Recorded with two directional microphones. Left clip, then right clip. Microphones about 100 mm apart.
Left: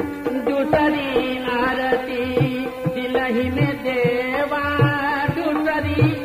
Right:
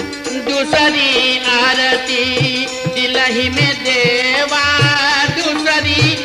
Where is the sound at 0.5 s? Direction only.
45° right (ahead or behind).